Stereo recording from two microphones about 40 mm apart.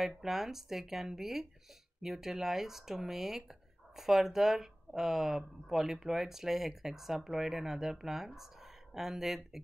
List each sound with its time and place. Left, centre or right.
0.0 s speech: centre